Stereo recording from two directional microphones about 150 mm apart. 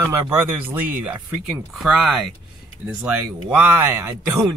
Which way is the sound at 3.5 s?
15° right (ahead or behind).